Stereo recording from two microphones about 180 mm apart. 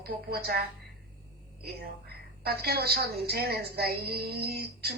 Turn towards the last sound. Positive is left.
turn(degrees=-60)  # may be behind; listen again after turning